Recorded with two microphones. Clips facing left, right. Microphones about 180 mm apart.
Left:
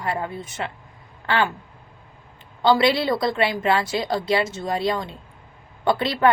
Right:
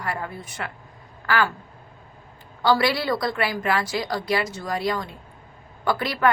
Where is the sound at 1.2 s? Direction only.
25° left (ahead or behind).